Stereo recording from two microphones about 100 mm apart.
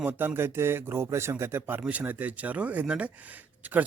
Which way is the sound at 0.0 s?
15° right (ahead or behind).